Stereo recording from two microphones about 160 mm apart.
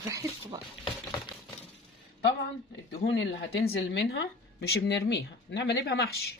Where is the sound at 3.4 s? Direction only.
85° left.